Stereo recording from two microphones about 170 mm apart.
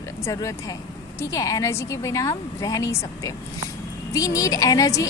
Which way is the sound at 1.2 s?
20° left (ahead or behind).